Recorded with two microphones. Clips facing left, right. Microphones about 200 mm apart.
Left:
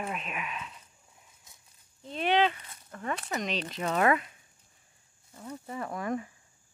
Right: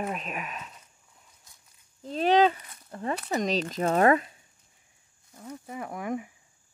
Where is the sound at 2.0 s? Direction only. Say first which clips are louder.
Right 5 dB; 40° right (ahead or behind).